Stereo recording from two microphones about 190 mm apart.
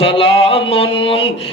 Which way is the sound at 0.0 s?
30° left (ahead or behind).